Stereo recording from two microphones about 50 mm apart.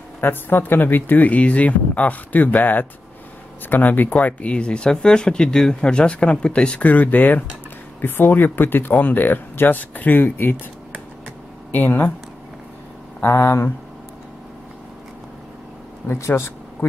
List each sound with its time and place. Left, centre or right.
0.2 s speech: left
6.9 s speech: left
11.7 s speech: left
13.2 s speech: left
16.2 s speech: left